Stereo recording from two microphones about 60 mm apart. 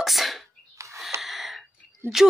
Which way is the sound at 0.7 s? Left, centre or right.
Right.